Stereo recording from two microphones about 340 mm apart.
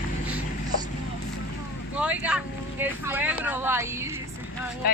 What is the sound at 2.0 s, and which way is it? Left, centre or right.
Speech, centre.